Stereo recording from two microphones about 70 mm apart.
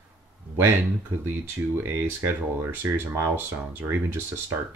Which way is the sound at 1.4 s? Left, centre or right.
Right.